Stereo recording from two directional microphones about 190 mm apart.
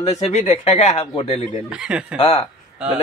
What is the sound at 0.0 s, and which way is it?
A man's voice, 35° left (ahead or behind).